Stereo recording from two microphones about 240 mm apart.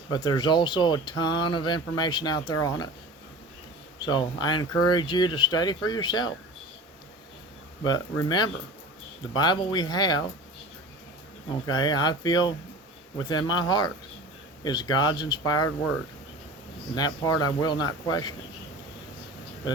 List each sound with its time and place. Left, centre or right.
0.1 s speech: centre
4.0 s speech: centre
7.9 s speech: centre
11.6 s speech: centre
16.9 s speech: centre